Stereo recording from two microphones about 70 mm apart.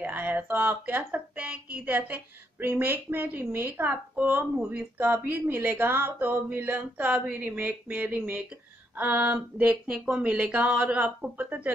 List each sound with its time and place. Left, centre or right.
0.0 s speech: right